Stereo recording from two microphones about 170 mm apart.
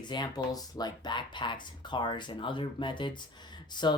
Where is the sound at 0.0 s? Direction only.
25° left (ahead or behind).